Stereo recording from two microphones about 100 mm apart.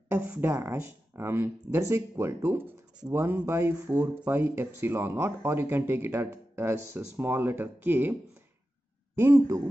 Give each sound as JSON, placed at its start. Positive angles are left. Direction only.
{"t": 0.1, "sound": "speech", "side_deg": -15}